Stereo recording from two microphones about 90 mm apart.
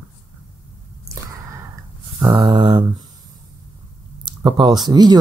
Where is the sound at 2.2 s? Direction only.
55° right (ahead or behind).